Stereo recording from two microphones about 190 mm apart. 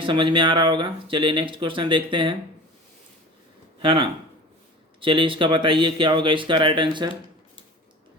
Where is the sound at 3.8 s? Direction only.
30° right (ahead or behind).